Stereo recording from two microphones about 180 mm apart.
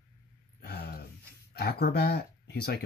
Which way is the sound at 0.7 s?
60° left (ahead or behind).